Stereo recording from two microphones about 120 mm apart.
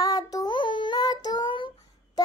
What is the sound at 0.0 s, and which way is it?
Child singing, 30° left (ahead or behind).